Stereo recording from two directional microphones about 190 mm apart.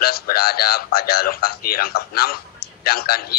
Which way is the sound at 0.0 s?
55° left (ahead or behind).